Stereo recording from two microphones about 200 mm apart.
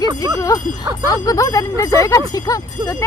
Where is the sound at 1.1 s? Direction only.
15° left (ahead or behind).